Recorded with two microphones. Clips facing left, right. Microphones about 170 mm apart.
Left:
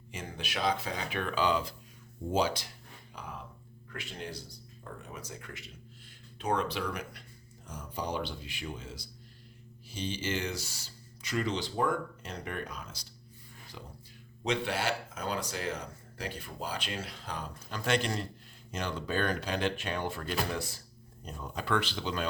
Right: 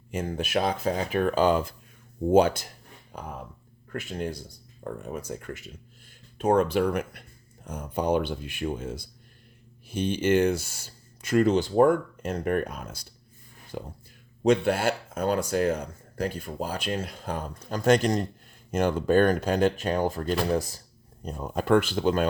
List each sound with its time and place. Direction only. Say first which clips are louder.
0.1 s speech: right 12 dB; 45° right (ahead or behind)